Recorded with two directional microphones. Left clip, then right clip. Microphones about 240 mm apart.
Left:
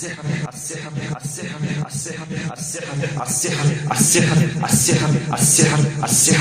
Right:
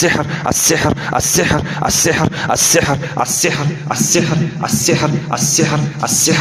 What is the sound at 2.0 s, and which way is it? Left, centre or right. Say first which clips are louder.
Speech: right 15 dB; right.